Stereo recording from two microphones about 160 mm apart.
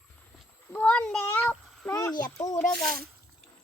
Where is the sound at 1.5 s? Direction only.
15° left (ahead or behind).